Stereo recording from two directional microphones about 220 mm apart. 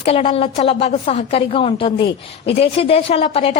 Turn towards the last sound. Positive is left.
turn(degrees=25)  # may be behind; listen again after turning